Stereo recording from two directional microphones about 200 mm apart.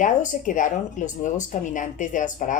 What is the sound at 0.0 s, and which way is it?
Speech, 40° left (ahead or behind).